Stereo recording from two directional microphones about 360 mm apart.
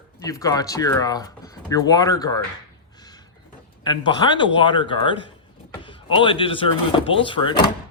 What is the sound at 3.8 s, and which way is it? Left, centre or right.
Speech, centre.